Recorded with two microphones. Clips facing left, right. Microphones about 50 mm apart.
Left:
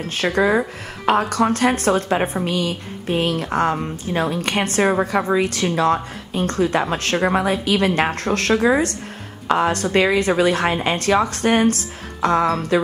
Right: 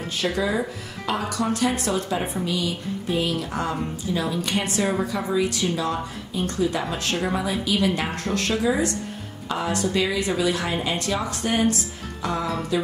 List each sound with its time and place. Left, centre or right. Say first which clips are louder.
0.1 s a woman's voice: left 7 dB; left